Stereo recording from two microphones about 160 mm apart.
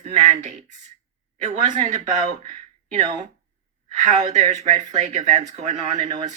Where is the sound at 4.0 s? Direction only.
45° right (ahead or behind).